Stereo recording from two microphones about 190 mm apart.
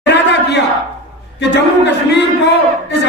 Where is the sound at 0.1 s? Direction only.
65° left (ahead or behind).